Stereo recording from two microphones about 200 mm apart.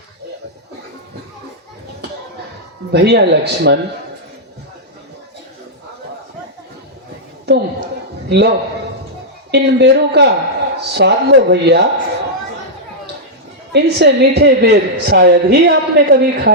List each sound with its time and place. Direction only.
2.9 s a man's voice: 55° right (ahead or behind)
7.5 s a sound: 55° right (ahead or behind)
8.3 s a man's voice: 55° right (ahead or behind)
13.7 s a man's voice: 55° right (ahead or behind)